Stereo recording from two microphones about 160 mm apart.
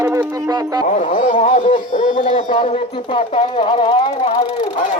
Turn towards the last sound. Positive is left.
turn(degrees=30)  # may be behind; listen again after turning